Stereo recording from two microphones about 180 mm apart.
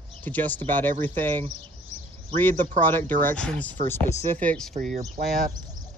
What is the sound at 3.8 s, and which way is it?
Speech, 40° right (ahead or behind).